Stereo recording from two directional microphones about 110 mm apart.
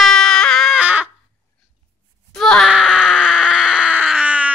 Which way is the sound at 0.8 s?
15° right (ahead or behind).